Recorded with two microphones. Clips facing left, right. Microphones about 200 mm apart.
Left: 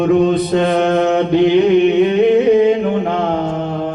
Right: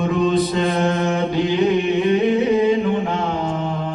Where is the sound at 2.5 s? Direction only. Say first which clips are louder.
Left 4 dB; 55° left (ahead or behind).